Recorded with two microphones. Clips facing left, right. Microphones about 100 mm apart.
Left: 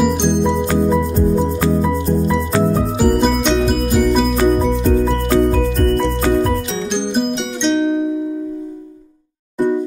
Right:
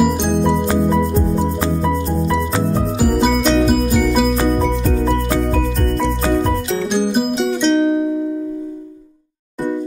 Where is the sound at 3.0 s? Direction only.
Centre (ahead or behind).